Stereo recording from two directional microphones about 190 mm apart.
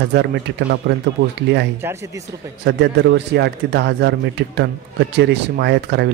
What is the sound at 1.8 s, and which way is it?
Speech, 15° right (ahead or behind).